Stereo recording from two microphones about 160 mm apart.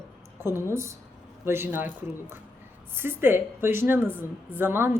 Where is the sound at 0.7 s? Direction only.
15° right (ahead or behind).